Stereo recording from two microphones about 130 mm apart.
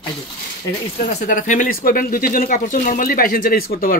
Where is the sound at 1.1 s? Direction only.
75° left (ahead or behind).